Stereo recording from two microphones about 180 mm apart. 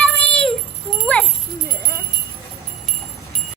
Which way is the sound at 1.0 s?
5° left (ahead or behind).